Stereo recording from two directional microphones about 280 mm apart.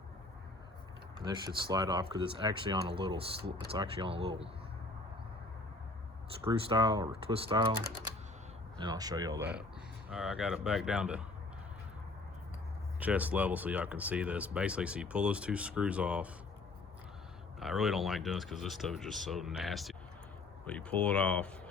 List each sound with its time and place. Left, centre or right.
1.2 s speech: centre
6.4 s speech: centre
8.8 s speech: centre
10.1 s speech: centre
13.0 s speech: centre
17.6 s speech: centre